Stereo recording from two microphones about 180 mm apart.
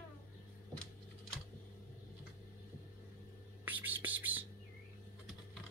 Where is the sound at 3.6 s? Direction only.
10° right (ahead or behind).